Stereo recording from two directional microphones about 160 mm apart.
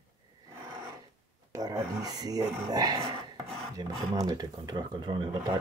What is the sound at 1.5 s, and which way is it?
Speech, 20° right (ahead or behind).